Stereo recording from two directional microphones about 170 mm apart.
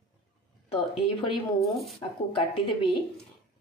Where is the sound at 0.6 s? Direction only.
35° left (ahead or behind).